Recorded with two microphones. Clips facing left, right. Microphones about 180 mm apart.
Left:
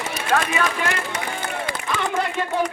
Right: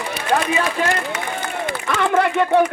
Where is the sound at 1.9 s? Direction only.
60° right (ahead or behind).